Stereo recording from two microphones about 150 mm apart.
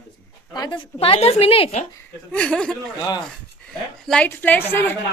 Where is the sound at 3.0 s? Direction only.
30° left (ahead or behind).